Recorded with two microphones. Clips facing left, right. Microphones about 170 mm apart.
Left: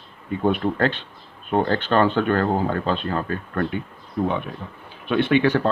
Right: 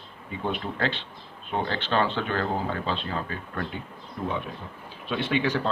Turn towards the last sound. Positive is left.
turn(degrees=60)  # may be behind; listen again after turning